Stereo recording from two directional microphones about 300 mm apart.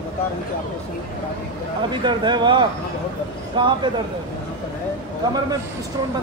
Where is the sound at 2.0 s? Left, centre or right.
Centre.